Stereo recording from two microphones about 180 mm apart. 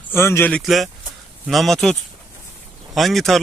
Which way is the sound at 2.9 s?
Centre (ahead or behind).